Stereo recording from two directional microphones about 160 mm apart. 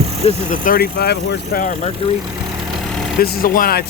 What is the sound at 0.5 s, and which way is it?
Speech, 60° left (ahead or behind).